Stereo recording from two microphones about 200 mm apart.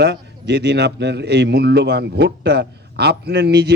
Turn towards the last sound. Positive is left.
turn(degrees=-55)  # may be behind; listen again after turning